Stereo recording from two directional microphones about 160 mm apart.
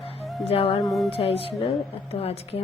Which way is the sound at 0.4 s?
35° left (ahead or behind).